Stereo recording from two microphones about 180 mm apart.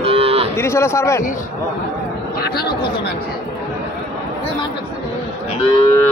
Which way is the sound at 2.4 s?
60° left (ahead or behind).